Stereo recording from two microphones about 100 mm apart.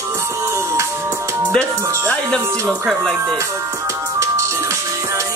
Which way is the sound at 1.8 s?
30° right (ahead or behind).